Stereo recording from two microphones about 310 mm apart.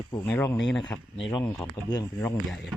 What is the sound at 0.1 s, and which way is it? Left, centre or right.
Speech, centre.